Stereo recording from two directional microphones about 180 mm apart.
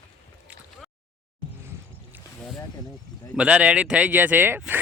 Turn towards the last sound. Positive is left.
turn(degrees=-10)  # may be behind; listen again after turning